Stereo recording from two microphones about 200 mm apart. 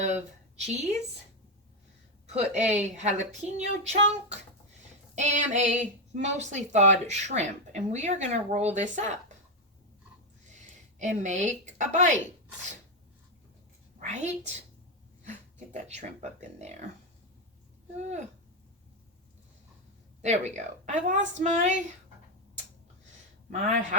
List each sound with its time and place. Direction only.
0.6 s speech: 35° right (ahead or behind)
2.3 s speech: 35° right (ahead or behind)
11.0 s speech: 35° right (ahead or behind)
14.1 s speech: 35° right (ahead or behind)
17.9 s speech: 35° right (ahead or behind)
20.2 s speech: 35° right (ahead or behind)
23.5 s speech: 35° right (ahead or behind)